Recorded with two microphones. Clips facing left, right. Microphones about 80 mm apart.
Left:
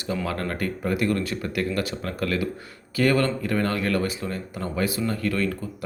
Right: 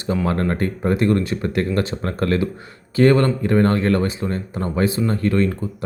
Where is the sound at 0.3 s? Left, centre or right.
Right.